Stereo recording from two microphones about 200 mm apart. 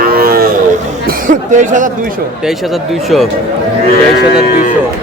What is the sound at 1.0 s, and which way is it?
Speech, 40° right (ahead or behind).